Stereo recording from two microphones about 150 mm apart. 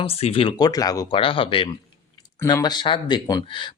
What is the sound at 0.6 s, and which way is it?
Speech, 25° left (ahead or behind).